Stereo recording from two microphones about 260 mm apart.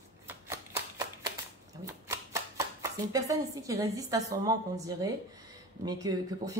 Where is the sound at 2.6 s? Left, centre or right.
Centre.